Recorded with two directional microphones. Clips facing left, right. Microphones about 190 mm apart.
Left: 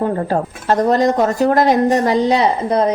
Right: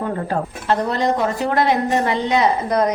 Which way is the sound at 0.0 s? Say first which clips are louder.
Left 5 dB; 40° left (ahead or behind).